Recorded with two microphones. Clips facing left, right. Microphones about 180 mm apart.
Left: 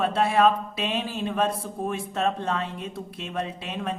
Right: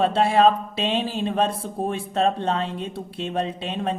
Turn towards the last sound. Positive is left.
turn(degrees=-30)  # may be behind; listen again after turning